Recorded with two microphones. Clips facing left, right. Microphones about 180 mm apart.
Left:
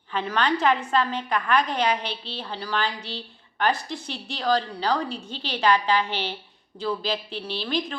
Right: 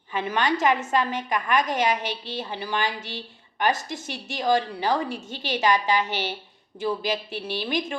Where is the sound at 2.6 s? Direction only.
10° right (ahead or behind).